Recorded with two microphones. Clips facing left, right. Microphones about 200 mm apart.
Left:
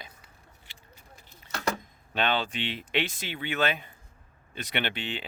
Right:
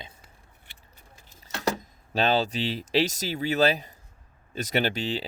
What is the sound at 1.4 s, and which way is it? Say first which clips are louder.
Speech: right 3 dB; 35° right (ahead or behind).